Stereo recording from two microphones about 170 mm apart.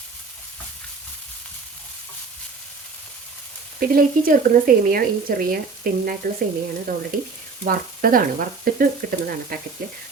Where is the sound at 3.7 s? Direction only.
60° right (ahead or behind).